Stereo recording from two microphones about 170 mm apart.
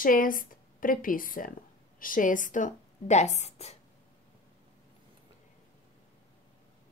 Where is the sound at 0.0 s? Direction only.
55° left (ahead or behind); by 3.7 s 40° left (ahead or behind).